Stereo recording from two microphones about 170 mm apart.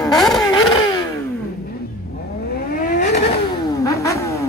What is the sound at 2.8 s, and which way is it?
Vehicle, 50° left (ahead or behind).